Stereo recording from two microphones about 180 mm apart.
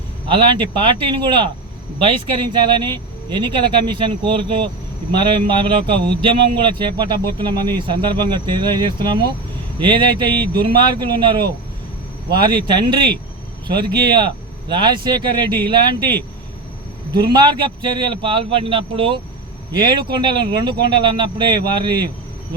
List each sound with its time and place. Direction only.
0.3 s speech: 25° right (ahead or behind)
14.7 s speech: 25° right (ahead or behind)